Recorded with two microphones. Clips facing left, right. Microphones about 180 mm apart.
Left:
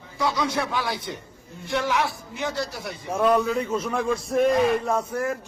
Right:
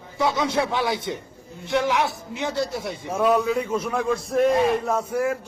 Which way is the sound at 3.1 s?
10° right (ahead or behind).